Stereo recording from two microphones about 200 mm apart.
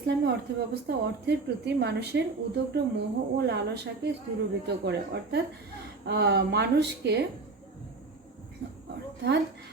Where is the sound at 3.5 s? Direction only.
60° right (ahead or behind).